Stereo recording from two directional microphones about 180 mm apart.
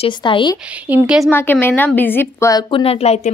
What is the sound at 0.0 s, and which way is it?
Speech, 25° left (ahead or behind).